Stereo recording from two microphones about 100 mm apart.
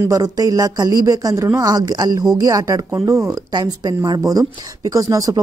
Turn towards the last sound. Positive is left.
turn(degrees=-35)  # may be behind; listen again after turning